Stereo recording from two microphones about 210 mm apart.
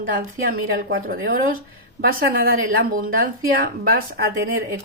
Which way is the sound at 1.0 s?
45° right (ahead or behind).